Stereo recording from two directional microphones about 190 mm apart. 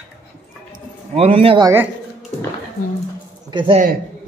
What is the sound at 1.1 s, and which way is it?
Speech, 30° right (ahead or behind).